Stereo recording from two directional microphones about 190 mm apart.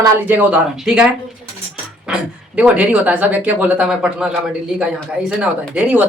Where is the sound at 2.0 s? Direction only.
5° right (ahead or behind).